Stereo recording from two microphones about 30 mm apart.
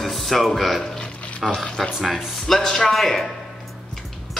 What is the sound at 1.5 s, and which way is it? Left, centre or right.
Speech, centre.